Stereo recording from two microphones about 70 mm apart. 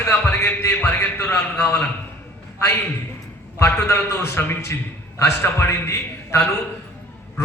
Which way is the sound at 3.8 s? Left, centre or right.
Left.